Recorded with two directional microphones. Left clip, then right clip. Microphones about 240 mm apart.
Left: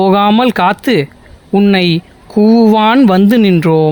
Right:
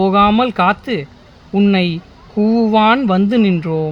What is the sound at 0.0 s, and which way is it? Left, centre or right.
Speech, left.